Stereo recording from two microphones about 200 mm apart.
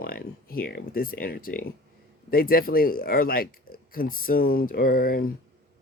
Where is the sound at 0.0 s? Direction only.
45° left (ahead or behind).